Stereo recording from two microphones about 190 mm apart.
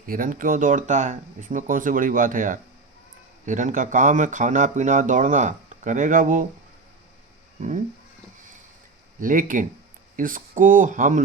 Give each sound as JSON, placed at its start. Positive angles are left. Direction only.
{"t": 0.0, "sound": "speech", "side_deg": -45}
{"t": 7.6, "sound": "speech", "side_deg": -40}
{"t": 9.2, "sound": "speech", "side_deg": -45}